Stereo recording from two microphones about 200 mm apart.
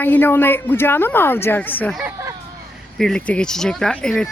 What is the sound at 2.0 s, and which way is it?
Speech, 10° right (ahead or behind).